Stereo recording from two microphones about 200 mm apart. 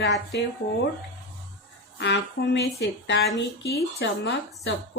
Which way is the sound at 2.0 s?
60° left (ahead or behind).